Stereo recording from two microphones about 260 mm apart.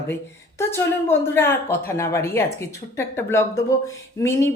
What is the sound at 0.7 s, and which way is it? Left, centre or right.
A man's voice, centre.